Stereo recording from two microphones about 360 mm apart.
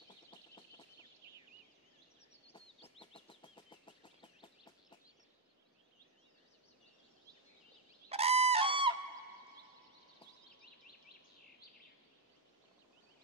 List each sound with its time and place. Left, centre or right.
2.4 s chicken: centre
8.1 s goose: centre